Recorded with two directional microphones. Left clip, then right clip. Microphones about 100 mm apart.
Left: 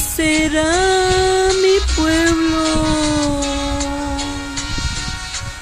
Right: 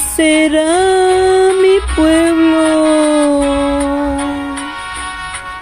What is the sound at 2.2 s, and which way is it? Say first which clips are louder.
Music: right 4 dB; 20° left (ahead or behind).